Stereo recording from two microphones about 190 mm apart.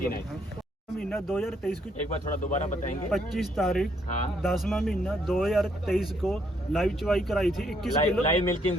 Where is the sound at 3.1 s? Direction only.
Centre (ahead or behind).